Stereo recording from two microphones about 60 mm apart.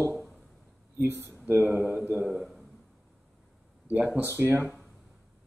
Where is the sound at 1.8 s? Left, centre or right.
Right.